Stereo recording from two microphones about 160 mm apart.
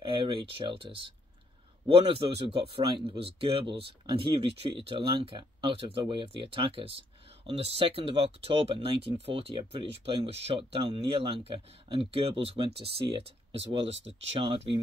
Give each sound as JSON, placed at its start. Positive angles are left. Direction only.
{"t": 0.0, "sound": "speech", "side_deg": -35}